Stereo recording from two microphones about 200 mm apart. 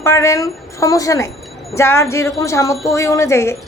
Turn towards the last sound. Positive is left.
turn(degrees=15)  # may be behind; listen again after turning